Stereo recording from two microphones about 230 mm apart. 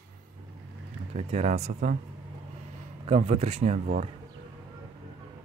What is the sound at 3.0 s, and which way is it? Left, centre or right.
Speech, right.